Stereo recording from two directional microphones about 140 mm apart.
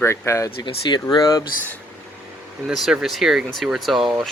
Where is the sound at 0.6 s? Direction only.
35° left (ahead or behind).